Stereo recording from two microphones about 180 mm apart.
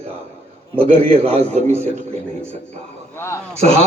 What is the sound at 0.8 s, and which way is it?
Speech, 30° right (ahead or behind).